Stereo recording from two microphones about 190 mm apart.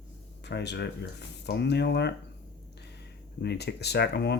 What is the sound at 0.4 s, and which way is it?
Speech, 65° left (ahead or behind).